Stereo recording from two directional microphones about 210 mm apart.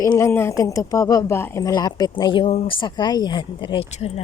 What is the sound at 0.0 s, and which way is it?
Speech, 15° left (ahead or behind).